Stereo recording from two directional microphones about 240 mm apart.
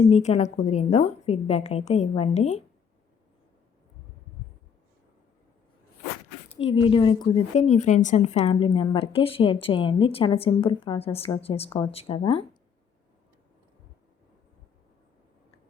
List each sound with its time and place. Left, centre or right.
0.0 s a woman's voice: left
6.7 s a woman's voice: left